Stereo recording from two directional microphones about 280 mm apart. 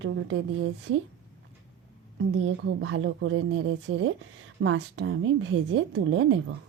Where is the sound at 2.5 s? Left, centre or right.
Right.